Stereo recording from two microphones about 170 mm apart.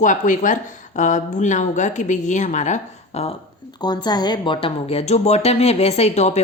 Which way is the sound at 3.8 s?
25° left (ahead or behind).